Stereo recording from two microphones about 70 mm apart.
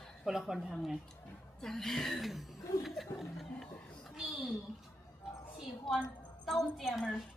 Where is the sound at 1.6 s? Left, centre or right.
Centre.